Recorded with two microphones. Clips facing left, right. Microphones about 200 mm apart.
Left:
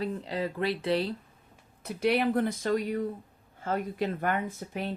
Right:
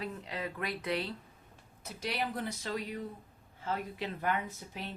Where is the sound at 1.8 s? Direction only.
60° left (ahead or behind).